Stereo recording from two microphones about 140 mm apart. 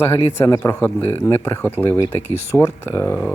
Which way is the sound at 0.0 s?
15° left (ahead or behind).